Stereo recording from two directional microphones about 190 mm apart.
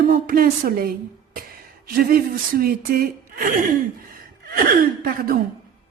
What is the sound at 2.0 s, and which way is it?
Speech, 50° right (ahead or behind).